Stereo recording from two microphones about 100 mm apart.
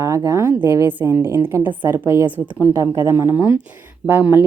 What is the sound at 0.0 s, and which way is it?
A woman's voice, 30° right (ahead or behind).